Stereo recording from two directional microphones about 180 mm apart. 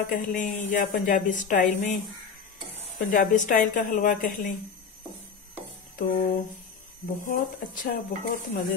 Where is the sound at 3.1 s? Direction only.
45° left (ahead or behind).